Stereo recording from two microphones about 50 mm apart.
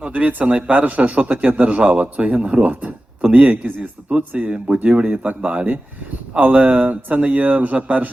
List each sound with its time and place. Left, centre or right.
0.0 s a man's voice: right